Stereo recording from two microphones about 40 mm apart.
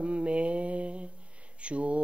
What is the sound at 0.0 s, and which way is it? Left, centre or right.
Mantra, right.